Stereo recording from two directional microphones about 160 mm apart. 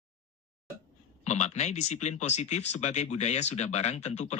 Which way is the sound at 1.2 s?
45° left (ahead or behind).